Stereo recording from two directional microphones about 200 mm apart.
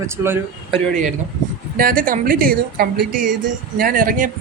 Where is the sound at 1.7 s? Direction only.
45° right (ahead or behind).